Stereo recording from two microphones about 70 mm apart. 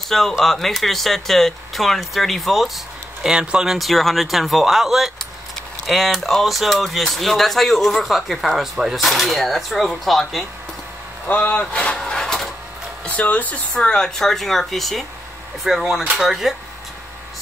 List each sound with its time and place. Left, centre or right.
0.1 s speech: centre
11.2 s speech: left
11.7 s vehicle: centre
13.0 s speech: left; by 16.5 s centre